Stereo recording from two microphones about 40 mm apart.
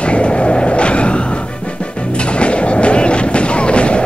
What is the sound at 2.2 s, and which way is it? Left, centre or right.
Artillery fire, left.